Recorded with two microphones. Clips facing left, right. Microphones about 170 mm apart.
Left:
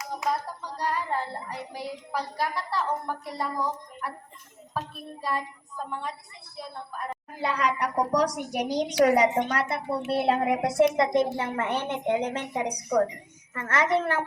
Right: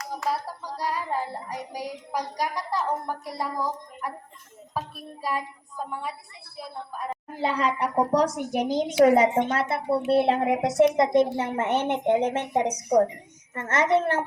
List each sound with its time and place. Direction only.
0.3 s child singing: 10° right (ahead or behind)
4.7 s a woman's voice: 10° right (ahead or behind)
7.4 s a woman's voice: 30° right (ahead or behind)